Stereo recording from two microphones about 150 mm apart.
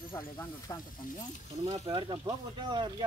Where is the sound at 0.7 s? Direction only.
25° left (ahead or behind).